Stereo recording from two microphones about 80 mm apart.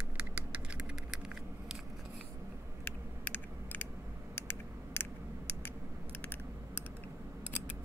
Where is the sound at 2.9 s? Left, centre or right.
Left.